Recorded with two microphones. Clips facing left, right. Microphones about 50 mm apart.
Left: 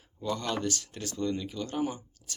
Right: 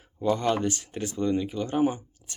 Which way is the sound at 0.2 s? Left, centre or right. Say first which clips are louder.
Right 7 dB; right.